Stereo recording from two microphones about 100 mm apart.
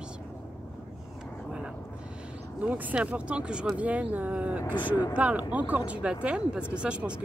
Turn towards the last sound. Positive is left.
turn(degrees=-10)  # may be behind; listen again after turning